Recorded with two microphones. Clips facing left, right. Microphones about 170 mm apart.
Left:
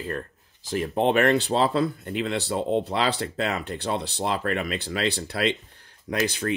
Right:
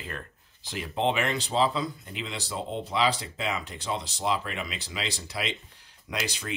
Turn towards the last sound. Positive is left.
turn(degrees=55)  # may be behind; listen again after turning